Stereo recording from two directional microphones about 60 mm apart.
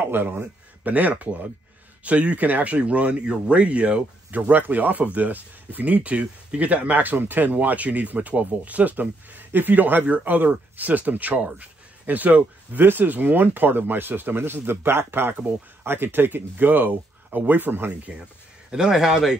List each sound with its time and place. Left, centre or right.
0.1 s a man's voice: right
0.4 s speech: right
18.7 s a man's voice: centre